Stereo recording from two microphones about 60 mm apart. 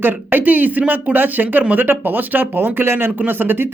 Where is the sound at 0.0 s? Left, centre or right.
Right.